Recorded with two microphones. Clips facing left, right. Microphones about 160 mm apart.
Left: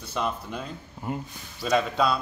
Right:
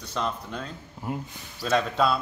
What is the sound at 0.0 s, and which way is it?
Speech, 10° left (ahead or behind).